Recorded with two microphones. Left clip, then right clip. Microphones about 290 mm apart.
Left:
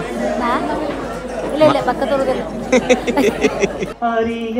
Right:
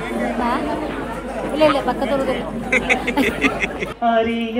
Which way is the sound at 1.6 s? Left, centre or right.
Centre.